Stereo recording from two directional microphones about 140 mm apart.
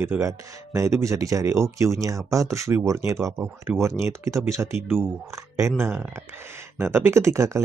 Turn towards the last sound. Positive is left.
turn(degrees=-20)  # may be behind; listen again after turning